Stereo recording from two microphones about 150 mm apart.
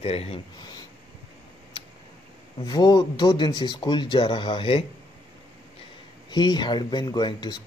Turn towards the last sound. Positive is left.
turn(degrees=30)  # may be behind; listen again after turning